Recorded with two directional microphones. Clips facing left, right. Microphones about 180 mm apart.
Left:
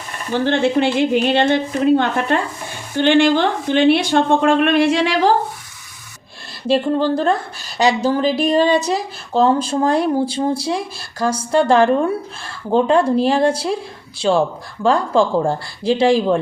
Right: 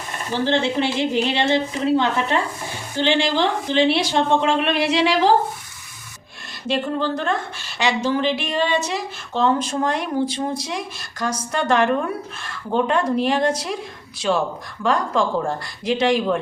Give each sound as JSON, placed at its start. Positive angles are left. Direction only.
{"t": 0.4, "sound": "a woman's voice", "side_deg": 55}
{"t": 6.7, "sound": "speech", "side_deg": 35}